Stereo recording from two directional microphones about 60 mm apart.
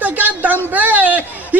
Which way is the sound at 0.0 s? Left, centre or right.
Right.